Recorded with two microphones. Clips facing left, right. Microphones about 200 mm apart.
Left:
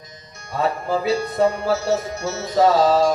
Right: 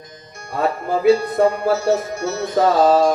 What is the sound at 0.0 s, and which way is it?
Music, 55° right (ahead or behind).